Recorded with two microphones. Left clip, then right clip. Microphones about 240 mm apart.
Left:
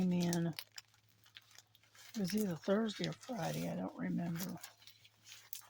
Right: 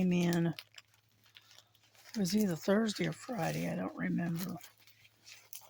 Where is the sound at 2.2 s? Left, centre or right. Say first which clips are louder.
Right 5 dB; right.